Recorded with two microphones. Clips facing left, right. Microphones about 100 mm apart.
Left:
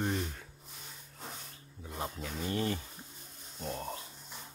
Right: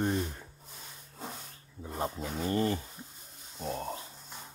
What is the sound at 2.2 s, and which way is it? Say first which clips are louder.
Speech: right 4 dB; 10° right (ahead or behind).